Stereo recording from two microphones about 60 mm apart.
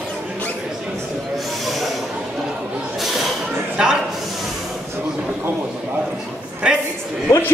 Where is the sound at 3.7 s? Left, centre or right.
Centre.